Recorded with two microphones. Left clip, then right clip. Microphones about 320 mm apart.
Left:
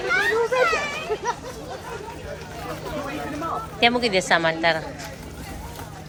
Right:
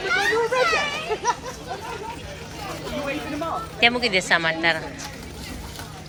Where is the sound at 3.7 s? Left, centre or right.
Centre.